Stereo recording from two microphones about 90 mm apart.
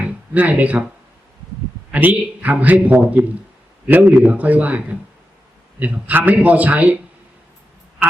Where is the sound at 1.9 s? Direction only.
20° right (ahead or behind).